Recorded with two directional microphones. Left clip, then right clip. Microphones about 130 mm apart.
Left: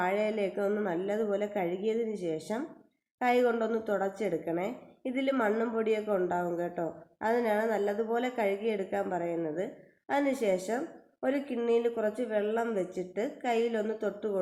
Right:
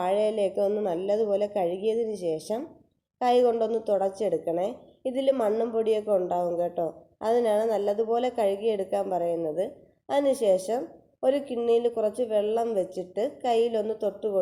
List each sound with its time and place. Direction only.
0.0 s a woman's voice: 25° right (ahead or behind)